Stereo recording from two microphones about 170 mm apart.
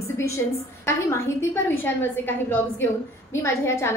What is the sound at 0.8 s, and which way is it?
A woman's voice, 15° left (ahead or behind).